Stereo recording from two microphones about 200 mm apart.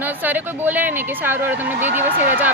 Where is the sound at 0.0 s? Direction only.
10° right (ahead or behind).